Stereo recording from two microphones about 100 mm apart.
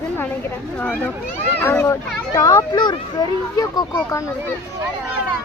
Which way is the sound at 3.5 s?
35° left (ahead or behind).